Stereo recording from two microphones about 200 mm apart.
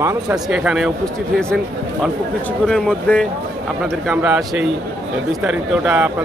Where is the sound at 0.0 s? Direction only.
10° right (ahead or behind).